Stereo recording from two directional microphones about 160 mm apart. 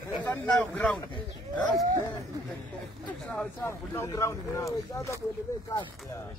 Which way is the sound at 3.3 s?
10° left (ahead or behind).